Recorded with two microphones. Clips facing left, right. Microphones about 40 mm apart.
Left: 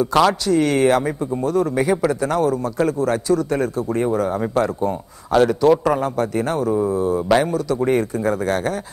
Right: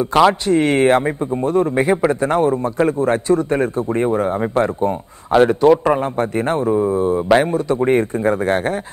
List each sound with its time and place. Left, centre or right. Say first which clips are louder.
0.3 s a man's voice: right 2 dB; right